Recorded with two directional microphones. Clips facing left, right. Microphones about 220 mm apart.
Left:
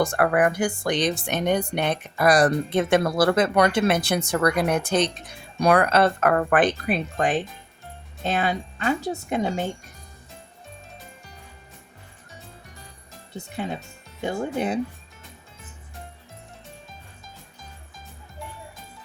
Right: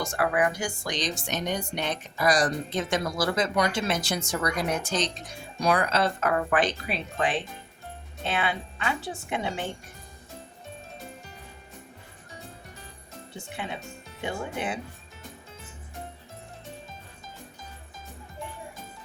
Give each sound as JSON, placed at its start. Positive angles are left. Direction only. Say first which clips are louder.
{"t": 0.0, "sound": "a woman's voice", "louder": "left 5 dB", "side_deg": 55}
{"t": 13.3, "sound": "speech", "louder": "left 6 dB", "side_deg": 40}